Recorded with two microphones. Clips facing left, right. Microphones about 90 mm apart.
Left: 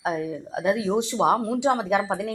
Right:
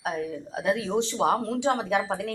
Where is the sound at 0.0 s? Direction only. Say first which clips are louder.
Left 3 dB; 20° left (ahead or behind).